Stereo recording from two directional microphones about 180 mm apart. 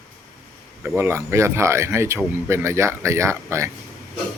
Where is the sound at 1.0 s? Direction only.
15° right (ahead or behind).